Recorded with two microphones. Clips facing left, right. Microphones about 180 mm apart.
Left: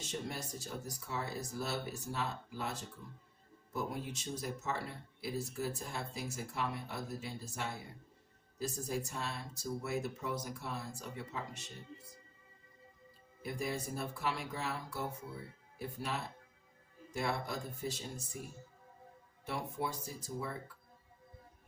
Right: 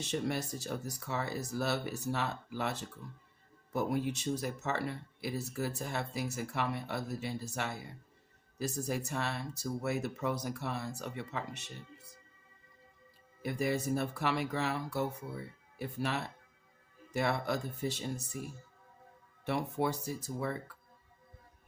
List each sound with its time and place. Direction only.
0.1 s speech: 70° right (ahead or behind)
13.4 s speech: 70° right (ahead or behind)
19.5 s speech: 70° right (ahead or behind)